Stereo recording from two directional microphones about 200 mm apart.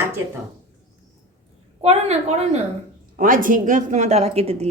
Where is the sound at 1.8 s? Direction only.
30° right (ahead or behind).